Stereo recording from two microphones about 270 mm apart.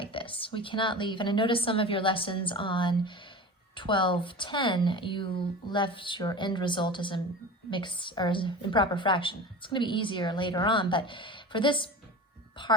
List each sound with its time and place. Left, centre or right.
0.0 s a woman's voice: centre